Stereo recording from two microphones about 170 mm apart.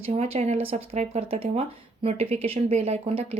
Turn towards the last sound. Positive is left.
turn(degrees=-35)  # may be behind; listen again after turning